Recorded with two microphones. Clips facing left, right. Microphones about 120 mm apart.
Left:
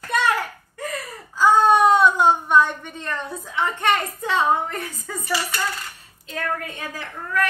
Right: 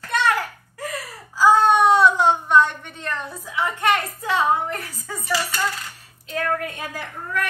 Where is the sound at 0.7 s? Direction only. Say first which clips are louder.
Left 1 dB; 5° right (ahead or behind).